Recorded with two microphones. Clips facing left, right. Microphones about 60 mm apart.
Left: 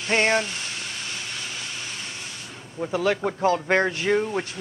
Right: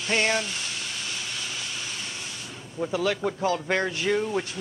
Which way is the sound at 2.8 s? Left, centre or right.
Left.